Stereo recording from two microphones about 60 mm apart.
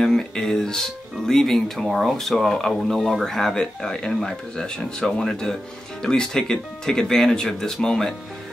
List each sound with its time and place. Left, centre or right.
0.0 s speech: centre